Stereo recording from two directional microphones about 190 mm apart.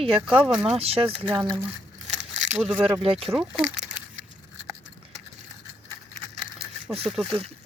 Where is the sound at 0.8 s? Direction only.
30° right (ahead or behind).